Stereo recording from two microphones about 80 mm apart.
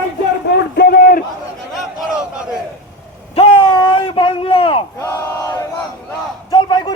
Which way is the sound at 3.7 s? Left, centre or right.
Left.